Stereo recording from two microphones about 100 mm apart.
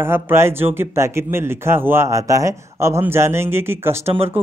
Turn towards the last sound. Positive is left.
turn(degrees=-25)  # may be behind; listen again after turning